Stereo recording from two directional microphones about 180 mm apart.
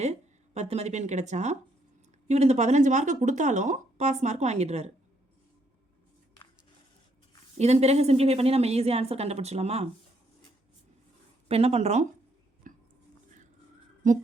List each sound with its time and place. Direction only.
0.0 s speech: 40° right (ahead or behind)
7.6 s speech: 35° right (ahead or behind)
11.4 s speech: 35° right (ahead or behind)
12.7 s chopping: 45° right (ahead or behind)